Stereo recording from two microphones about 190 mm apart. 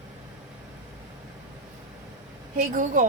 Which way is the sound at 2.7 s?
40° right (ahead or behind).